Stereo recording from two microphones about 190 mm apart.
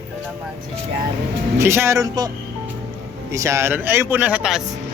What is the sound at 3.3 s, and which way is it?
Speech, 15° right (ahead or behind).